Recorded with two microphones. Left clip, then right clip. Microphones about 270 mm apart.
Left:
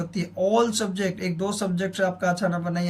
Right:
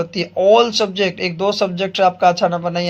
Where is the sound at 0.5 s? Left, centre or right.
Centre.